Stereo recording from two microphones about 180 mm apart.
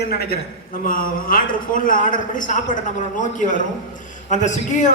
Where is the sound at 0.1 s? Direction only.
60° left (ahead or behind).